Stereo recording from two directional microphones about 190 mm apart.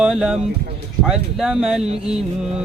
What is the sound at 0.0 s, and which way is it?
Speech, 5° right (ahead or behind).